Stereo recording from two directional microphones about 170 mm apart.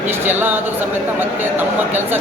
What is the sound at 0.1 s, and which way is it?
Speech, 10° right (ahead or behind).